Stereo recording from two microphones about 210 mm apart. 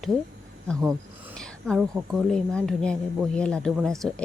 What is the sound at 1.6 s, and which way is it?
Speech, centre (ahead or behind).